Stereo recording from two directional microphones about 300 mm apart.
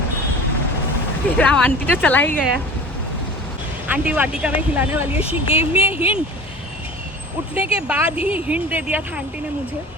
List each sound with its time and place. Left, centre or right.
1.4 s speech: centre
3.8 s speech: centre
5.2 s speech: centre
5.8 s speech: centre
7.5 s speech: centre